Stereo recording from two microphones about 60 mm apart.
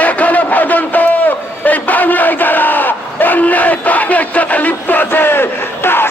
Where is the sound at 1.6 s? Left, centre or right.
Left.